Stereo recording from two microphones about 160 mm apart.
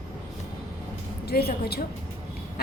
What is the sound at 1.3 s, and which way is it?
Speech, 75° left (ahead or behind).